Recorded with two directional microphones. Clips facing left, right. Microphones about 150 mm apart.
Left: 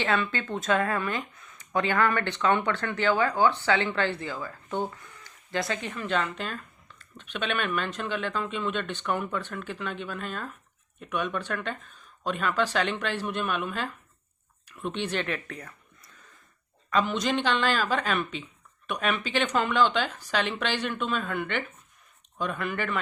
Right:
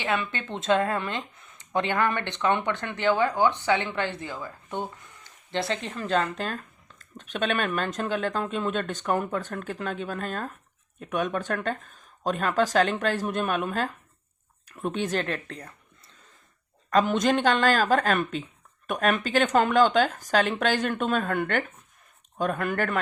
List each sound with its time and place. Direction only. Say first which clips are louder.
0.0 s speech: left 1 dB; 15° right (ahead or behind); by 16.1 s 30° right (ahead or behind)
16.9 s speech: right 4 dB; 45° right (ahead or behind)